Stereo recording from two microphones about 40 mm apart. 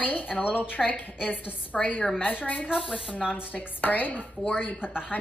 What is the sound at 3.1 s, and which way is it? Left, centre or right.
A woman's voice, left.